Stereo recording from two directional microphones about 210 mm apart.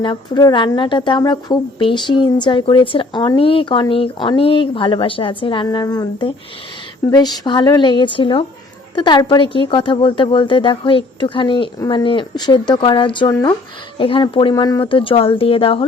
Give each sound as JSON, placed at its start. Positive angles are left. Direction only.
{"t": 0.0, "sound": "a woman's voice", "side_deg": 20}